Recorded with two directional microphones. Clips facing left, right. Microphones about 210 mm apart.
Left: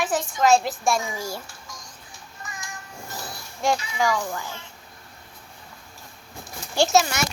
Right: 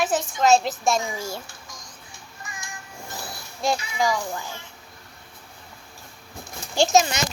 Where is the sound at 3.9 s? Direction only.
10° right (ahead or behind).